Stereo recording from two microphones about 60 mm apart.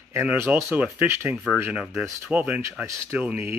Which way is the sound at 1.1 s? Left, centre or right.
Right.